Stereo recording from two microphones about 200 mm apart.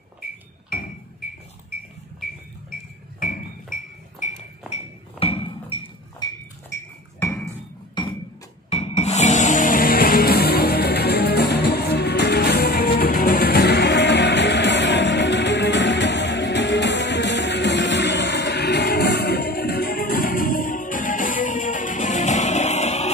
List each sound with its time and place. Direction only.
0.2 s music: 45° left (ahead or behind)
2.7 s music: 45° left (ahead or behind)
5.2 s music: 30° left (ahead or behind)